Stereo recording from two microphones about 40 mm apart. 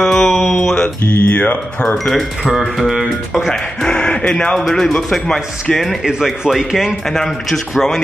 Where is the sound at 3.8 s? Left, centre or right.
Centre.